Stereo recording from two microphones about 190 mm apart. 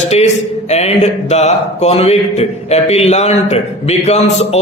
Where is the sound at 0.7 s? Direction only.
35° left (ahead or behind).